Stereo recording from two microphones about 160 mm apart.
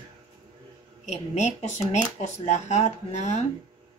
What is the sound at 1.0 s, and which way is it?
Speech, 45° left (ahead or behind).